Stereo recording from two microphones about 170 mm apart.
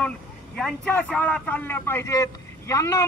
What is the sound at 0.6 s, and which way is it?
Speech, 10° left (ahead or behind).